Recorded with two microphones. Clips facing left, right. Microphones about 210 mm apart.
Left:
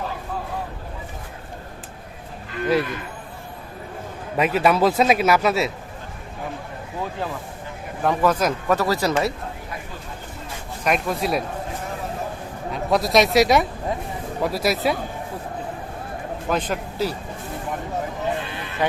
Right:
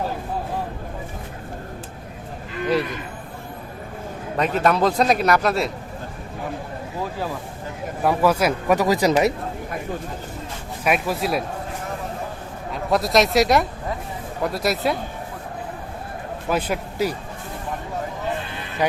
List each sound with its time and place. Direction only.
4.4 s a man's voice: 5° left (ahead or behind)
8.0 s speech: 10° right (ahead or behind)
10.8 s a man's voice: 5° right (ahead or behind)
12.7 s a man's voice: centre (ahead or behind)
16.5 s a man's voice: 10° right (ahead or behind)
18.8 s speech: 15° right (ahead or behind)